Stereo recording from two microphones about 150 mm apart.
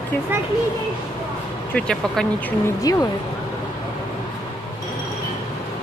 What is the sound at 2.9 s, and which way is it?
Speech, 25° left (ahead or behind).